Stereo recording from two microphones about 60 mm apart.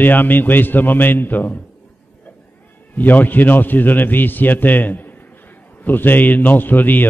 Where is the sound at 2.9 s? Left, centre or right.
Left.